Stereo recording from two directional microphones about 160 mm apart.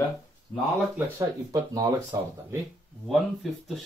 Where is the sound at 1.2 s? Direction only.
25° right (ahead or behind).